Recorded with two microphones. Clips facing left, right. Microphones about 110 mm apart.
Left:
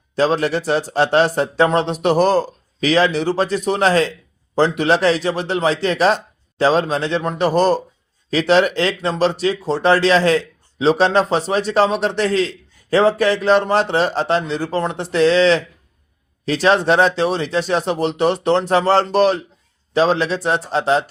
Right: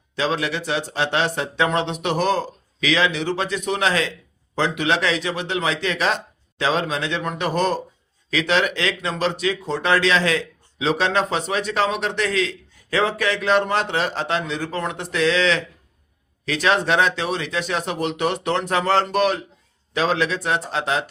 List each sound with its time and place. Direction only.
0.2 s a man's voice: 40° left (ahead or behind)